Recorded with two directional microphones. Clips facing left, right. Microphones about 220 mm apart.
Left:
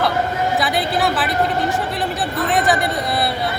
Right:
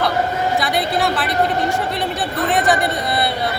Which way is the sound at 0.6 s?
Centre (ahead or behind).